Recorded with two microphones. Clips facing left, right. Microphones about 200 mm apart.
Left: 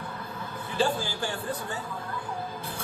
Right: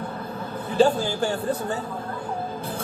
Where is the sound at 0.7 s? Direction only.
40° right (ahead or behind).